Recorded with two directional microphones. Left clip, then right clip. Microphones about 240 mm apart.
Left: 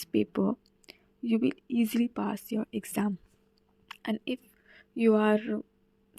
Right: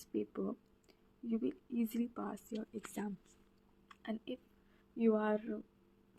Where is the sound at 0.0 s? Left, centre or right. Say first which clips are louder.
Left 11 dB; left.